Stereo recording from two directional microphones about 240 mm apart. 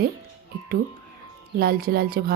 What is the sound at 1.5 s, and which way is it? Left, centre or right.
Speech, right.